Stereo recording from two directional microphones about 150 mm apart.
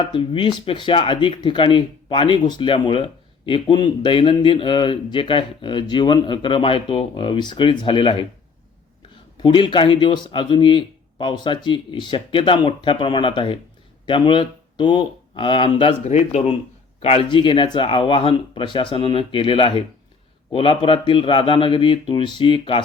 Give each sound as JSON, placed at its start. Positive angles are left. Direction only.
{"t": 0.0, "sound": "speech", "side_deg": 35}
{"t": 9.4, "sound": "speech", "side_deg": 30}